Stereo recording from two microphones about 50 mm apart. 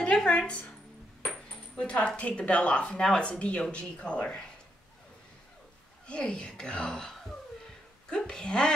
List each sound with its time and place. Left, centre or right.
0.0 s music: left
1.8 s speech: left
6.0 s speech: centre